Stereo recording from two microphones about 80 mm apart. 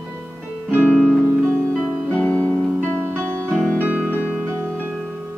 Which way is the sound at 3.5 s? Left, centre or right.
Centre.